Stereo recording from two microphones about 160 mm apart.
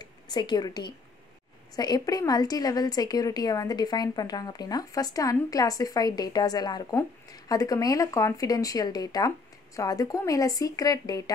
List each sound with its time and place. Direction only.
0.0 s a woman's voice: 25° left (ahead or behind)